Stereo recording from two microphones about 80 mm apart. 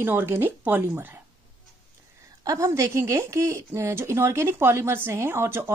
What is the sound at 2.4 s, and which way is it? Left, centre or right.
A woman's voice, right.